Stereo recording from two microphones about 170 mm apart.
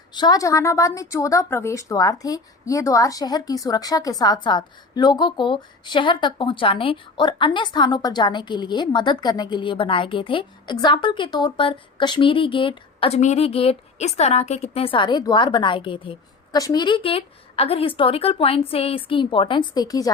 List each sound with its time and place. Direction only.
0.1 s a woman's voice: 25° left (ahead or behind)